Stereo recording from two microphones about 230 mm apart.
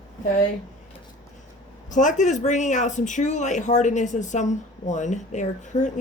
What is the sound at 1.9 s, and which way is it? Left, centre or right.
Speech, left.